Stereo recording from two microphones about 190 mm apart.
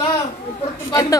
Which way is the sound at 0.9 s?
20° left (ahead or behind).